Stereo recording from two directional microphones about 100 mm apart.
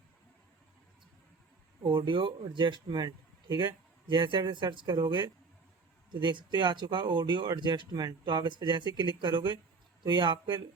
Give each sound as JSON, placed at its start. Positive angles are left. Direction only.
{"t": 1.8, "sound": "speech", "side_deg": -55}